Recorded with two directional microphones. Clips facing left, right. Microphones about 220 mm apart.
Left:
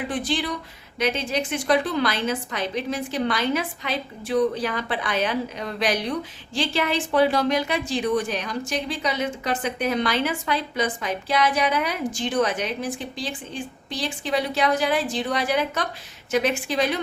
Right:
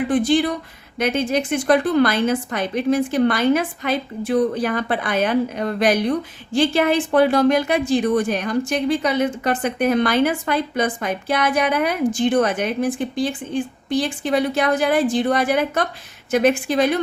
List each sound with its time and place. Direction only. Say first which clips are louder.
0.1 s a woman's voice: right 9 dB; 50° right (ahead or behind)